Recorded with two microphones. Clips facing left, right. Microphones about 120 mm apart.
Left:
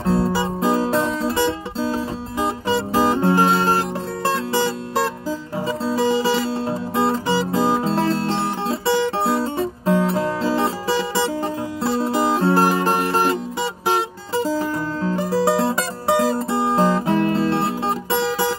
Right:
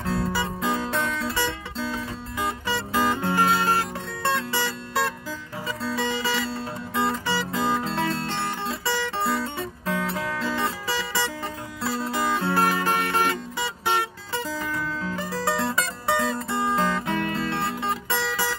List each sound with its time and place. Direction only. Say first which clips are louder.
0.0 s music: left 7 dB; 30° left (ahead or behind)
5.7 s music: left 8 dB; 30° left (ahead or behind)
8.0 s music: left 6 dB; centre (ahead or behind)
8.6 s guitar: left 11 dB; 30° left (ahead or behind)
9.3 s music: left 7 dB; 30° left (ahead or behind)
15.2 s music: left 9 dB; centre (ahead or behind)
16.3 s guitar: left 6 dB; 30° left (ahead or behind)